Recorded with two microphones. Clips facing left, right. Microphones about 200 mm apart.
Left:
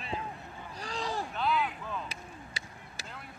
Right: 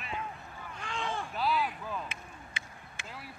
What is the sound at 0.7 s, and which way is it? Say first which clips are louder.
Boat: left 1 dB; 35° left (ahead or behind).